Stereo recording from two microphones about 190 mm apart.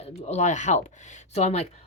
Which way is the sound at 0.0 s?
35° left (ahead or behind).